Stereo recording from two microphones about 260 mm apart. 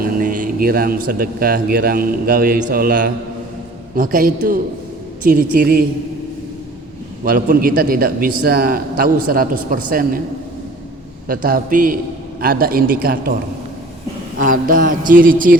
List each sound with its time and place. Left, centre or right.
0.0 s a man's voice: right
7.3 s a man's voice: right
11.3 s a man's voice: right
14.4 s a man's voice: right